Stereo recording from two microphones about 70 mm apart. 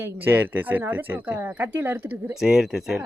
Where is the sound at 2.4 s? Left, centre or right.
Centre.